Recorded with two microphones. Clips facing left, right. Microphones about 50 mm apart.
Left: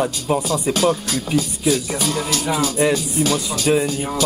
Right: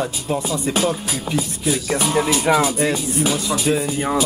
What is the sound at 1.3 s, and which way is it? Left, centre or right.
Speech, right.